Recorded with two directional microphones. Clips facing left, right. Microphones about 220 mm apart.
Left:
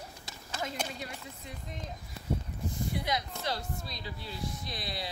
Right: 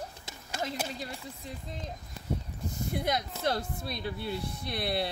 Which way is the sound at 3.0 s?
50° right (ahead or behind).